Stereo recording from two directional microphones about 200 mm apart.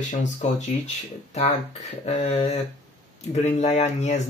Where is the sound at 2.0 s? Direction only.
30° left (ahead or behind).